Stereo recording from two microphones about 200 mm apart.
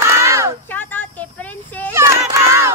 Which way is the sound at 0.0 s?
15° right (ahead or behind).